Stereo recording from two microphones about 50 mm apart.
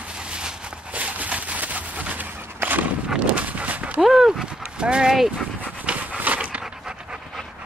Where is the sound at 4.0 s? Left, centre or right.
Centre.